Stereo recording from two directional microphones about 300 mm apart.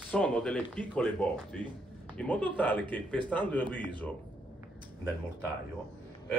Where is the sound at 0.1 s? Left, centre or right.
Centre.